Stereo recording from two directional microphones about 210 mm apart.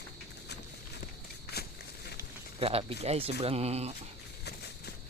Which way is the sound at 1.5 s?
50° left (ahead or behind).